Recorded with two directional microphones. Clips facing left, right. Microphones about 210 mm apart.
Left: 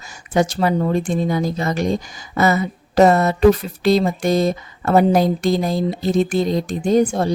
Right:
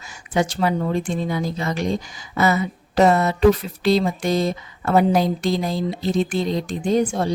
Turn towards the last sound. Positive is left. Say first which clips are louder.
# left 3 dB
turn(degrees=40)  # may be behind; listen again after turning